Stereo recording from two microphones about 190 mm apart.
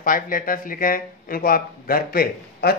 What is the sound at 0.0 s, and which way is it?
Speech, 45° left (ahead or behind).